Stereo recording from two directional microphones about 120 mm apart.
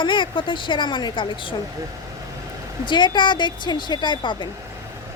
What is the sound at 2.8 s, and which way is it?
Speech, 40° left (ahead or behind).